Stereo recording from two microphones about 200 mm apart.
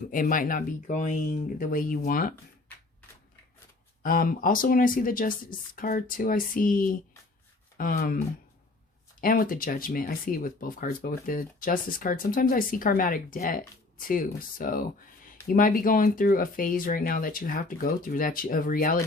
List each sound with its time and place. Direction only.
0.1 s speech: 45° left (ahead or behind)
4.0 s speech: 45° left (ahead or behind)
9.2 s speech: 45° left (ahead or behind)